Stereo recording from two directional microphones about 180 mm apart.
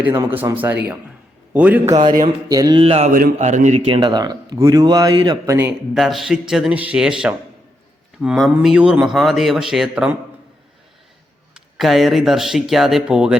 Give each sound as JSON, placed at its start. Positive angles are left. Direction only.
{"t": 0.0, "sound": "a man's voice", "side_deg": -15}
{"t": 3.1, "sound": "speech", "side_deg": -50}
{"t": 3.8, "sound": "speech", "side_deg": -30}
{"t": 5.5, "sound": "speech", "side_deg": -5}
{"t": 11.5, "sound": "speech", "side_deg": 0}